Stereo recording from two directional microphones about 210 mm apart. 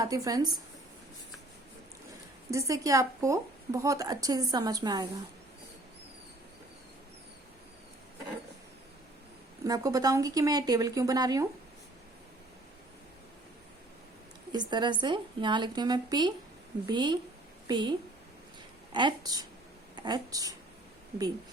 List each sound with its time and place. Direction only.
0.0 s a woman's voice: 15° right (ahead or behind)
2.5 s a woman's voice: 15° right (ahead or behind)
9.6 s a woman's voice: 15° right (ahead or behind)
14.5 s a woman's voice: 20° right (ahead or behind)
18.9 s a woman's voice: 20° right (ahead or behind)